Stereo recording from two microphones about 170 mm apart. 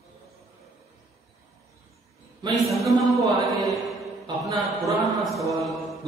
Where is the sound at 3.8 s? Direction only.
Centre (ahead or behind).